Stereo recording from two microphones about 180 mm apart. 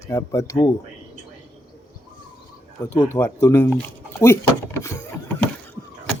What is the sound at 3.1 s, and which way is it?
Speech, 15° left (ahead or behind).